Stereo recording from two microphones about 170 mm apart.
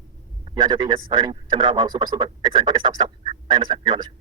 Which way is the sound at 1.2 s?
30° right (ahead or behind).